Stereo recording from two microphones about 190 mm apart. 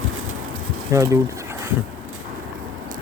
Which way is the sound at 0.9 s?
15° right (ahead or behind).